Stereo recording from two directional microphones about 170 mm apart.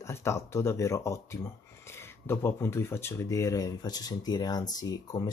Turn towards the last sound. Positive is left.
turn(degrees=20)  # may be behind; listen again after turning